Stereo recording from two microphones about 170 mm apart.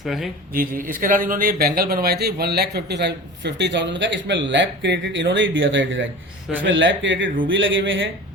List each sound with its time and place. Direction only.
0.0 s speech: centre (ahead or behind)
0.5 s speech: 55° right (ahead or behind); by 8.0 s 90° right